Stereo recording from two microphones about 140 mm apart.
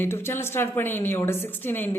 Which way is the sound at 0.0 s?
15° left (ahead or behind).